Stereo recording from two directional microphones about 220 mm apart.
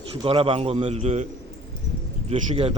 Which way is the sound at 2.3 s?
25° right (ahead or behind).